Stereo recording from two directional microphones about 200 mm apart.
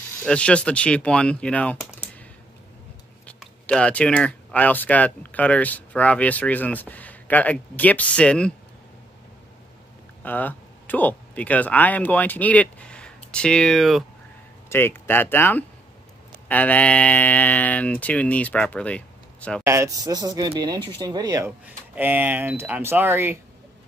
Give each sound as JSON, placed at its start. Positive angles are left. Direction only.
{"t": 0.2, "sound": "speech", "side_deg": 5}
{"t": 3.3, "sound": "speech", "side_deg": 5}
{"t": 10.2, "sound": "speech", "side_deg": 10}
{"t": 14.7, "sound": "speech", "side_deg": 10}
{"t": 19.6, "sound": "speech", "side_deg": -15}
{"t": 21.5, "sound": "speech", "side_deg": -10}